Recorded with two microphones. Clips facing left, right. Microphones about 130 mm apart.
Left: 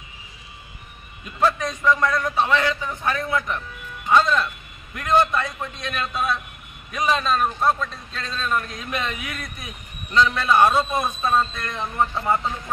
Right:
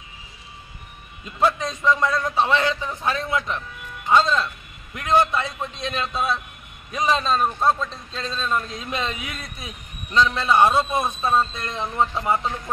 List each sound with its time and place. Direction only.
1.6 s a man's voice: 20° right (ahead or behind)
4.9 s a man's voice: 15° right (ahead or behind)